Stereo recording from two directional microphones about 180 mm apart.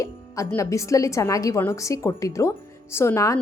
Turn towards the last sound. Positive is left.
turn(degrees=15)  # may be behind; listen again after turning